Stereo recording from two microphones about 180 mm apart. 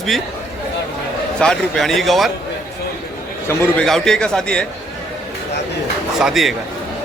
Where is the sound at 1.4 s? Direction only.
5° left (ahead or behind).